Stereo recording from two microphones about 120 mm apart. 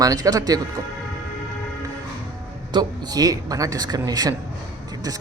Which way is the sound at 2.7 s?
30° right (ahead or behind).